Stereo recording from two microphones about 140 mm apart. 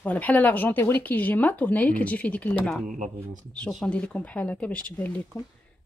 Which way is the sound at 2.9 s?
65° right (ahead or behind).